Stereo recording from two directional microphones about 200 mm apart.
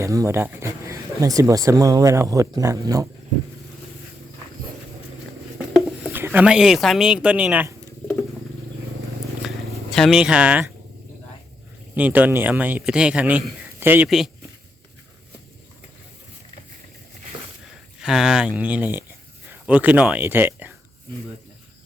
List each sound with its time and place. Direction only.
0.0 s speech: 15° right (ahead or behind)
5.5 s speech: 10° right (ahead or behind)
9.9 s speech: centre (ahead or behind)
11.9 s speech: 10° right (ahead or behind)
18.0 s speech: centre (ahead or behind)